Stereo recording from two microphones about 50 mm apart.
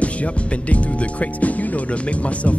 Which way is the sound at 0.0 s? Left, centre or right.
Left.